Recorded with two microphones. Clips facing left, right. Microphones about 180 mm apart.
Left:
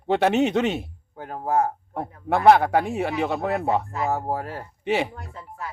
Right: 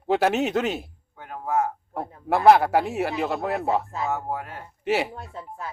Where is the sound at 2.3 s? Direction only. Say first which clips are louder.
Even; centre (ahead or behind).